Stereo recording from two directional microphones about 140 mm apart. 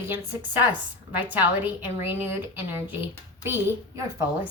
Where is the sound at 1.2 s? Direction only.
10° right (ahead or behind).